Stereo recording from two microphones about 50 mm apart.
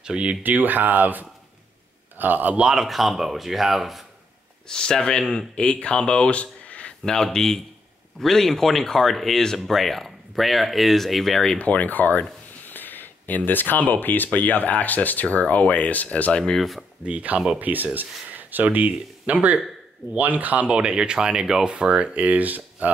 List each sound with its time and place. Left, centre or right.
0.0 s speech: right
0.4 s a man's voice: right
2.7 s speech: centre
4.6 s speech: centre
7.3 s speech: centre
11.5 s speech: left
16.4 s speech: centre
17.0 s speech: right